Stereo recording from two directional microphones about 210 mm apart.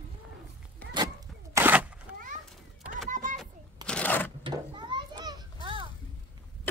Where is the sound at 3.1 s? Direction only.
35° right (ahead or behind).